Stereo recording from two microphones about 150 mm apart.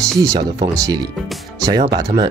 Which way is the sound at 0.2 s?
25° right (ahead or behind).